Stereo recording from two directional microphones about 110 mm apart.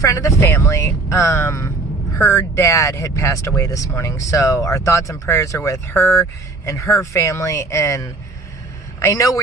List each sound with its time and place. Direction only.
0.0 s speech: 30° left (ahead or behind)